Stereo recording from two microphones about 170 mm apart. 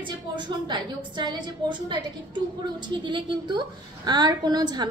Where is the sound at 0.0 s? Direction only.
25° right (ahead or behind).